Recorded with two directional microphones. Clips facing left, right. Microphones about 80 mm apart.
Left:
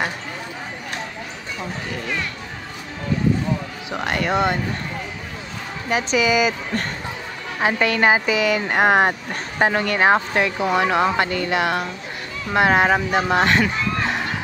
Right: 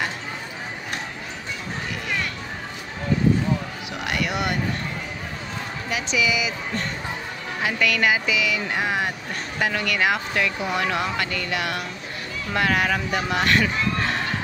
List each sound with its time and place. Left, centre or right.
3.9 s a sound: left
5.9 s speech: left
7.6 s speech: left
9.6 s speech: left